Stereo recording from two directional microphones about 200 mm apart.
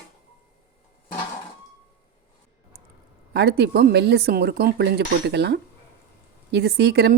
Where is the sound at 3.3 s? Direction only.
55° right (ahead or behind).